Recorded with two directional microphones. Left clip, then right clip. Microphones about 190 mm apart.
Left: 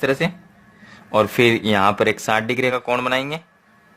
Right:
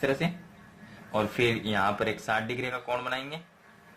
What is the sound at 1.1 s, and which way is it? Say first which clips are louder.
Speech: left 11 dB; 50° left (ahead or behind).